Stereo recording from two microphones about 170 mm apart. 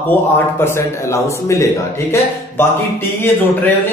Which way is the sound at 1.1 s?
15° left (ahead or behind).